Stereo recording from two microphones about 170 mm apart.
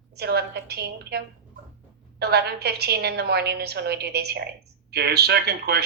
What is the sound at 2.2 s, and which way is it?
A woman's voice, 70° right (ahead or behind).